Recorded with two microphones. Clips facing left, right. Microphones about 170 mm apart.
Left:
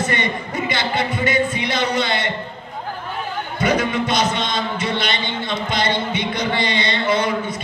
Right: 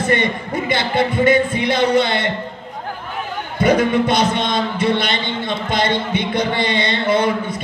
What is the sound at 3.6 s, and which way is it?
A man's voice, 55° right (ahead or behind).